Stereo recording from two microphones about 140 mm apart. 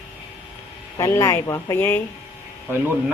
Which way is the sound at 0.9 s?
25° left (ahead or behind).